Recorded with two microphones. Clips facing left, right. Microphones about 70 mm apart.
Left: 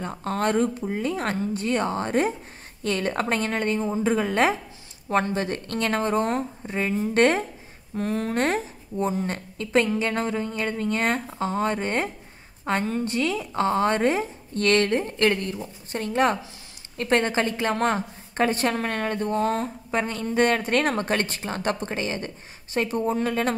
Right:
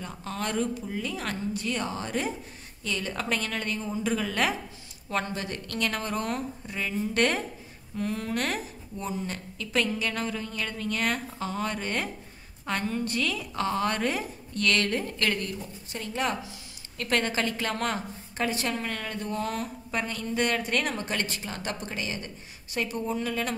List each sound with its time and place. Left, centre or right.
0.0 s a woman's voice: left
16.9 s a woman's voice: left